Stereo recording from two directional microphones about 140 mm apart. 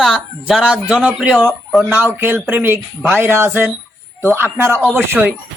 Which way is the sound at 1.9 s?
15° right (ahead or behind).